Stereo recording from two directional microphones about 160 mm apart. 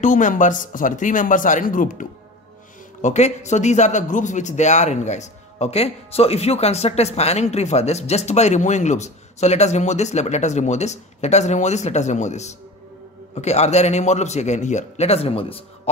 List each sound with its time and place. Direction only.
0.0 s speech: 50° left (ahead or behind)
3.0 s a man's voice: 45° left (ahead or behind)